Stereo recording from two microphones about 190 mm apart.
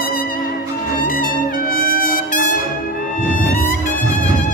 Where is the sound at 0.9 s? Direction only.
45° left (ahead or behind).